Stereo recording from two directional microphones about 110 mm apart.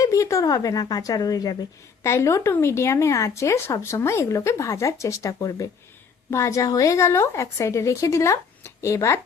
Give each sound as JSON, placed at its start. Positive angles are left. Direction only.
{"t": 0.0, "sound": "speech", "side_deg": 30}